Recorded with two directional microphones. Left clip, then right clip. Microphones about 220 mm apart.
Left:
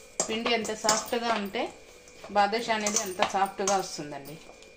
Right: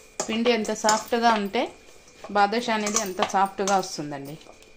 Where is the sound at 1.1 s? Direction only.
50° right (ahead or behind).